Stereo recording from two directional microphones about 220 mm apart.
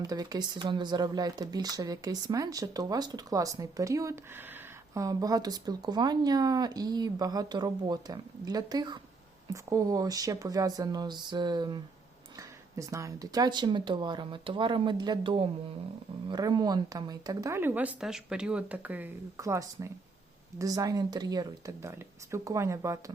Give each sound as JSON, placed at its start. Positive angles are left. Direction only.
{"t": 0.0, "sound": "speech", "side_deg": -15}